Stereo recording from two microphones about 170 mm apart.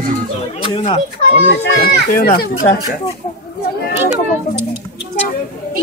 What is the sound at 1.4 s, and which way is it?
Speech, 80° left.